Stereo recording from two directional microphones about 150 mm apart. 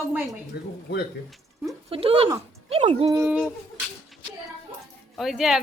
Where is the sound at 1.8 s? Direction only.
40° right (ahead or behind).